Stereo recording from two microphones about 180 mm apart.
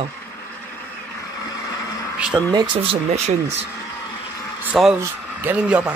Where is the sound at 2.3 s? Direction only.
25° right (ahead or behind).